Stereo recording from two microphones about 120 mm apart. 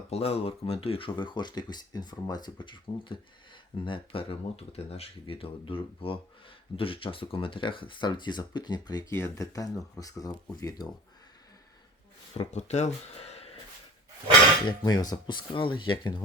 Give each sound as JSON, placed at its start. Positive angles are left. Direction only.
{"t": 0.1, "sound": "speech", "side_deg": 55}
{"t": 9.1, "sound": "speech", "side_deg": 25}
{"t": 12.3, "sound": "speech", "side_deg": 65}
{"t": 14.7, "sound": "speech", "side_deg": 35}